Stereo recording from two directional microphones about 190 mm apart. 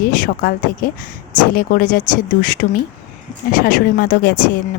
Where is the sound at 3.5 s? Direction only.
50° left (ahead or behind).